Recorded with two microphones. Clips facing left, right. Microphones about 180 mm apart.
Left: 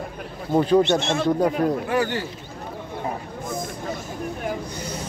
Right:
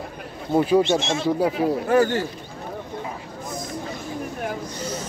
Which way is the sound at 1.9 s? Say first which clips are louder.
Right 5 dB; 45° right (ahead or behind).